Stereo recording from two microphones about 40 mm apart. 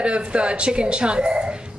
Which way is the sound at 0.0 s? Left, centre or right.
Right.